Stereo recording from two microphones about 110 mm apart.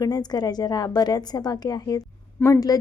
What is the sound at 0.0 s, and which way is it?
A woman's voice, 35° left (ahead or behind).